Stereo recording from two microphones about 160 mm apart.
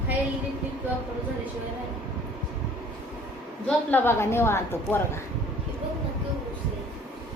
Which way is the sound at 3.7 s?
15° left (ahead or behind).